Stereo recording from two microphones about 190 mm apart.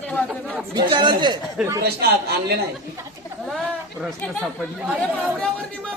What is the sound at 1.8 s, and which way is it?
Speech, 60° right (ahead or behind).